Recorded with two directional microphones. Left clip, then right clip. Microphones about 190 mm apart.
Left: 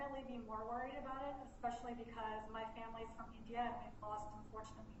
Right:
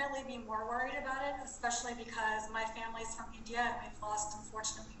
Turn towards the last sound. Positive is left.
turn(degrees=-40)  # may be behind; listen again after turning